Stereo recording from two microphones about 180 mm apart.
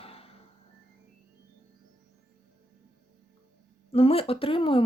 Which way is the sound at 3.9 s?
35° left (ahead or behind).